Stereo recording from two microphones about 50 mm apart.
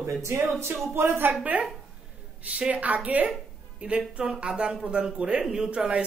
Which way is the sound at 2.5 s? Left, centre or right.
Right.